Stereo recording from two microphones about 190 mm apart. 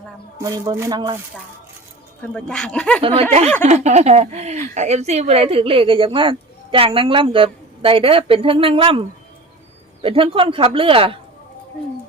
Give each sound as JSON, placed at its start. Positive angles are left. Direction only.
{"t": 0.3, "sound": "a woman's voice", "side_deg": -15}
{"t": 2.2, "sound": "speech", "side_deg": 5}
{"t": 3.6, "sound": "a woman's voice", "side_deg": -35}